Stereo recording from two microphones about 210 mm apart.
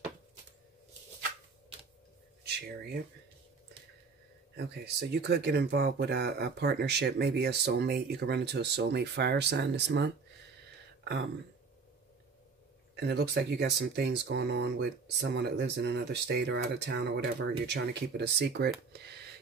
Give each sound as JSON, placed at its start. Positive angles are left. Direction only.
{"t": 2.4, "sound": "speech", "side_deg": -50}
{"t": 4.6, "sound": "speech", "side_deg": -50}
{"t": 12.9, "sound": "speech", "side_deg": -55}
{"t": 18.9, "sound": "a sound", "side_deg": -50}